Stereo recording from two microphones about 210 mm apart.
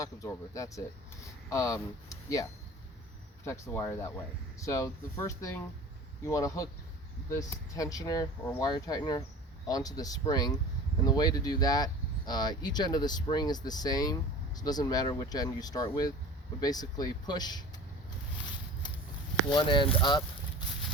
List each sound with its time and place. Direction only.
0.0 s speech: 15° left (ahead or behind)
19.5 s speech: 25° left (ahead or behind)